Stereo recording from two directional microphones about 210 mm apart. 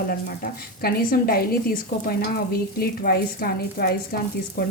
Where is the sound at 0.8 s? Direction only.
45° left (ahead or behind).